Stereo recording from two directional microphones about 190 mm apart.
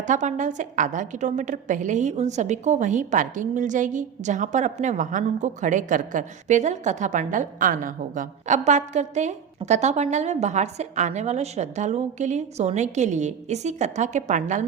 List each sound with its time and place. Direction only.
0.1 s a woman's voice: 40° right (ahead or behind)